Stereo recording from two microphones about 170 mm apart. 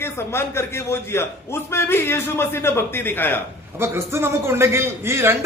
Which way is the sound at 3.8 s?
15° right (ahead or behind).